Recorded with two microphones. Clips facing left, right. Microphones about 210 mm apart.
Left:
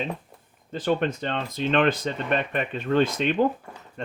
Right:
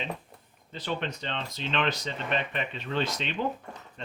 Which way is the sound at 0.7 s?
50° left (ahead or behind).